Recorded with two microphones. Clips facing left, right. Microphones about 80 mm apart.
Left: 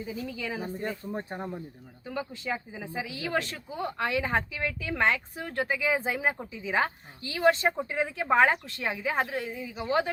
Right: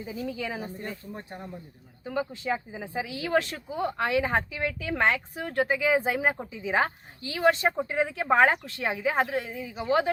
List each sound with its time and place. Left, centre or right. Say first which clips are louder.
0.0 s speech: right 2 dB; centre
0.8 s speech: left 4 dB; left
2.0 s speech: right 4 dB; centre